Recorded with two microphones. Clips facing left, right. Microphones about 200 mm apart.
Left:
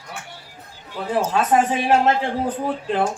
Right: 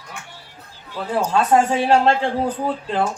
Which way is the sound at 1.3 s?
20° left (ahead or behind).